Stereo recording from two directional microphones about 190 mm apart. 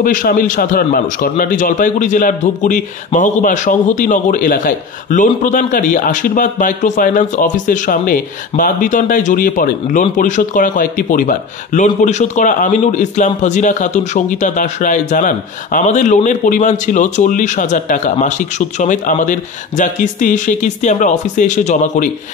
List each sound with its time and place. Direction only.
0.0 s a man's voice: 45° left (ahead or behind)